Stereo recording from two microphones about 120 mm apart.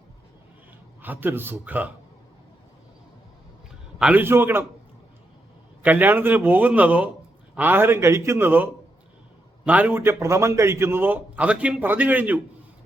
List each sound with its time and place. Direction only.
1.0 s a man's voice: 15° right (ahead or behind)
3.9 s a sound: 5° right (ahead or behind)
4.2 s a man's voice: 20° right (ahead or behind)
5.8 s a man's voice: 15° right (ahead or behind)